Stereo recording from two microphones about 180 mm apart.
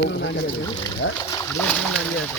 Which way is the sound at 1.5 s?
10° left (ahead or behind).